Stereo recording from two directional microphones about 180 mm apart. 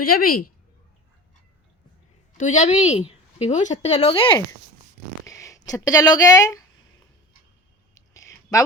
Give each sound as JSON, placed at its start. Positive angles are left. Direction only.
{"t": 0.0, "sound": "speech", "side_deg": 55}
{"t": 2.4, "sound": "a woman's voice", "side_deg": 40}
{"t": 5.2, "sound": "speech", "side_deg": 15}
{"t": 7.9, "sound": "a sound", "side_deg": 15}